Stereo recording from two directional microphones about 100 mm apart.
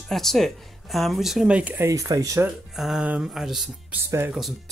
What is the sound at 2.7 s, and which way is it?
Speech, 5° right (ahead or behind).